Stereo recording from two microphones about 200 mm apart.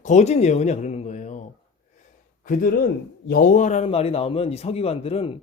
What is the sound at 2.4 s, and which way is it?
Speech, 45° left (ahead or behind).